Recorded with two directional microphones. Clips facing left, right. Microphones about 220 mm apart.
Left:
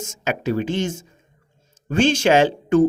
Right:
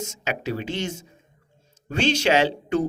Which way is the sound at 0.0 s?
50° left (ahead or behind).